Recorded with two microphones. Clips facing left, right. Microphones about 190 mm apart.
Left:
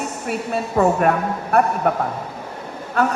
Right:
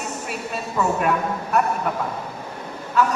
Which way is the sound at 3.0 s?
55° left (ahead or behind).